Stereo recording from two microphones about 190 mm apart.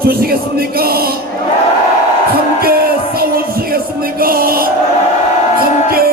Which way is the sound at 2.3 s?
55° right (ahead or behind).